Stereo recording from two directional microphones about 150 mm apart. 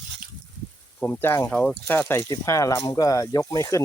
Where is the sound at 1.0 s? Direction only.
15° left (ahead or behind).